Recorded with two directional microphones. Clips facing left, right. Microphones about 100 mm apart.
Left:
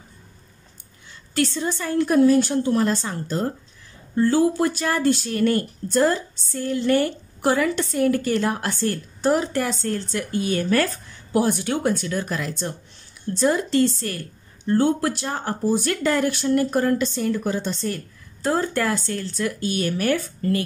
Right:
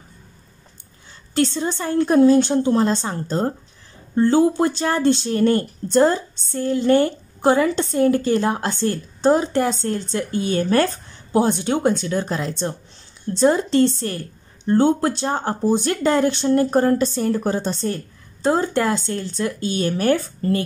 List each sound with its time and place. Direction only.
1.3 s speech: 25° right (ahead or behind)